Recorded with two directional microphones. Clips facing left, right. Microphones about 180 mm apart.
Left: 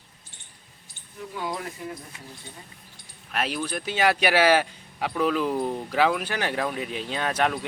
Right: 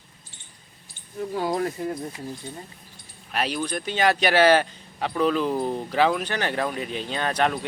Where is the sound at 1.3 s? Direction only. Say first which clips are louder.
Right 6 dB; 40° right (ahead or behind).